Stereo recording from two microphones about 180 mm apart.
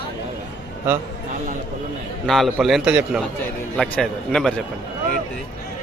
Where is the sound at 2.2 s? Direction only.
Centre (ahead or behind).